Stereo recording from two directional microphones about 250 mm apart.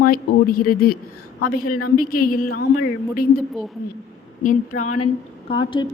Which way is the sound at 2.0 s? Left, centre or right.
Left.